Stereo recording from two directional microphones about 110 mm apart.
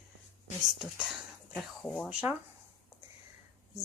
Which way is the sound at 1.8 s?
10° left (ahead or behind).